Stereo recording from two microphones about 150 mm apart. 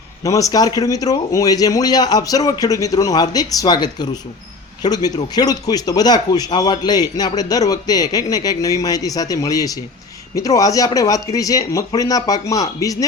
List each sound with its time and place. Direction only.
0.2 s speech: 25° left (ahead or behind)